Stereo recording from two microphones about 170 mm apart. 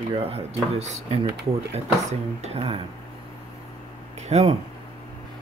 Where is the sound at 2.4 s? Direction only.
35° right (ahead or behind).